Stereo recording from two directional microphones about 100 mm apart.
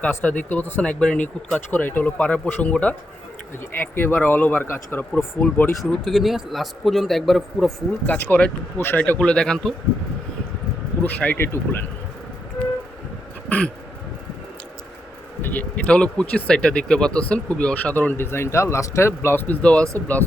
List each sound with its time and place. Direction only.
0.0 s speech: 15° left (ahead or behind)
5.7 s a man's voice: centre (ahead or behind)
8.0 s speech: 15° left (ahead or behind)
11.0 s speech: 15° left (ahead or behind)
13.5 s a sound: 15° left (ahead or behind)
15.4 s speech: 20° left (ahead or behind)